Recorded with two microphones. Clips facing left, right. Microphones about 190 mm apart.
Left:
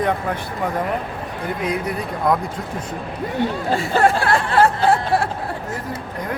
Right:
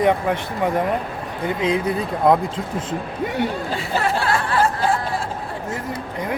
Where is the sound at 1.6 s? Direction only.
25° right (ahead or behind).